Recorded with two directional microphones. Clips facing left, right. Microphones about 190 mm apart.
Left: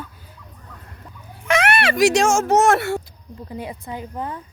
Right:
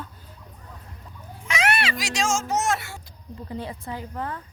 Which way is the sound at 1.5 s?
60° left (ahead or behind).